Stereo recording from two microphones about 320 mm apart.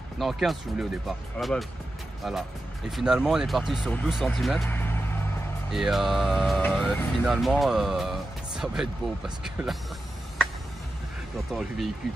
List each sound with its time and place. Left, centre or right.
0.2 s speech: centre